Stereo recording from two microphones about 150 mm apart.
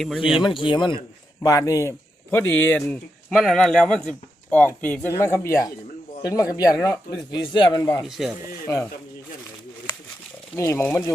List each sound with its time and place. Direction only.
0.0 s speech: centre (ahead or behind)
0.4 s a man's voice: 35° left (ahead or behind)
1.4 s a man's voice: 20° left (ahead or behind)
8.0 s speech: centre (ahead or behind)
8.6 s speech: 20° left (ahead or behind)
10.5 s speech: 20° left (ahead or behind)